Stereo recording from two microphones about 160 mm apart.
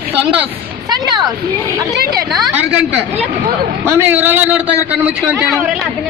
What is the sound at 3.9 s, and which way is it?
A man's voice, 15° right (ahead or behind).